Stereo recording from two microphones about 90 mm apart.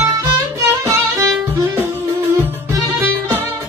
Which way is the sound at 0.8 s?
40° right (ahead or behind).